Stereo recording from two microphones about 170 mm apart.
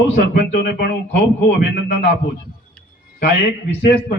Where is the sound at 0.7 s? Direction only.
70° left (ahead or behind).